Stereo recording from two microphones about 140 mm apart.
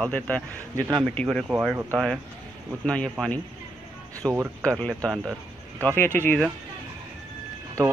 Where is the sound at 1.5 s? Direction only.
10° right (ahead or behind).